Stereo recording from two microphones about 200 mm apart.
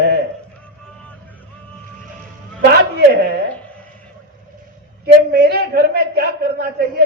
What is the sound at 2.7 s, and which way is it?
Speech, 55° right (ahead or behind).